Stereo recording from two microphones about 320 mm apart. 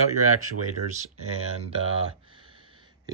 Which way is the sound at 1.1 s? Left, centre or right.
Right.